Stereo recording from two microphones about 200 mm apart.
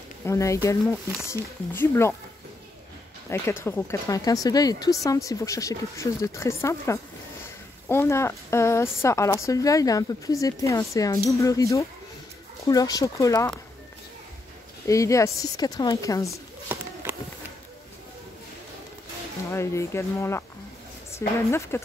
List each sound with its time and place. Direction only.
0.2 s speech: 15° left (ahead or behind)
3.3 s speech: 10° left (ahead or behind)
14.9 s speech: 15° left (ahead or behind)
17.0 s run: 10° right (ahead or behind)
19.5 s speech: 15° left (ahead or behind)
21.5 s speech: 15° left (ahead or behind)